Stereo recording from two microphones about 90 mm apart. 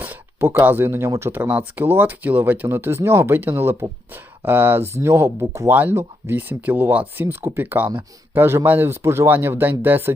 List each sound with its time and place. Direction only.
0.0 s speech: 25° right (ahead or behind)